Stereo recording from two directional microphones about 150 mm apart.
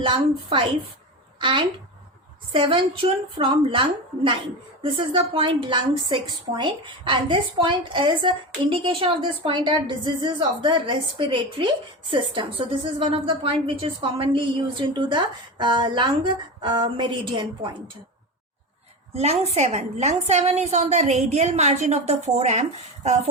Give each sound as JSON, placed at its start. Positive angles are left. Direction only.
{"t": 0.0, "sound": "a woman's voice", "side_deg": -35}
{"t": 19.1, "sound": "a woman's voice", "side_deg": -45}